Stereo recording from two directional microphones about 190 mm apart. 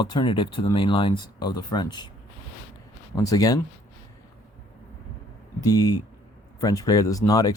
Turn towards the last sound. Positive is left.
turn(degrees=20)  # may be behind; listen again after turning